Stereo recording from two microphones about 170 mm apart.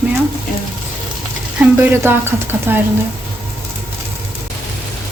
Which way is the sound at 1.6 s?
10° right (ahead or behind).